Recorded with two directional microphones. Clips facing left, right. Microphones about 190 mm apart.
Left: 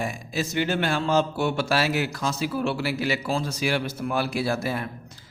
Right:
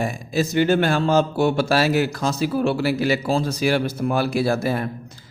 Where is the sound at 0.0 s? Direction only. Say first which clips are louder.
Right 6 dB; 40° right (ahead or behind).